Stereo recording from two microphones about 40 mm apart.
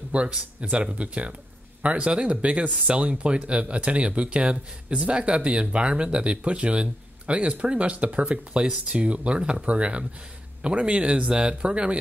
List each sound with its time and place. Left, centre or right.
0.1 s speech: right